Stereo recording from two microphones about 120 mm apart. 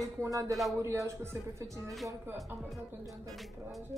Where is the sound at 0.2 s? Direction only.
25° right (ahead or behind).